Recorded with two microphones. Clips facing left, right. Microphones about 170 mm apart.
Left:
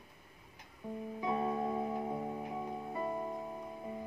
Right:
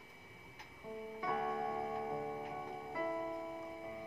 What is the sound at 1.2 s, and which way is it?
Music, 20° left (ahead or behind).